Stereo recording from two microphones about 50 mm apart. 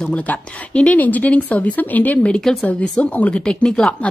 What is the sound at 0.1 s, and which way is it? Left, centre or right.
Speech, left.